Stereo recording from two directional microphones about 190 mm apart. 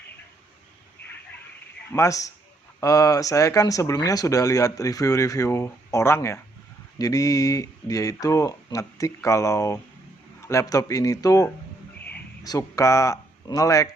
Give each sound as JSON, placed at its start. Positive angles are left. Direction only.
{"t": 1.9, "sound": "speech", "side_deg": 15}